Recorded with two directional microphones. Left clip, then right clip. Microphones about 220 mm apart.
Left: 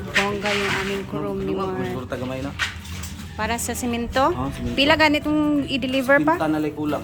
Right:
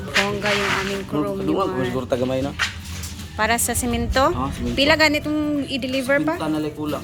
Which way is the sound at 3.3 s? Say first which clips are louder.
Right 5 dB; 5° left (ahead or behind).